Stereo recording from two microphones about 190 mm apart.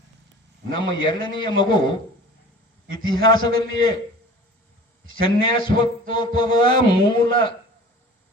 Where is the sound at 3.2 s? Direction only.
20° left (ahead or behind).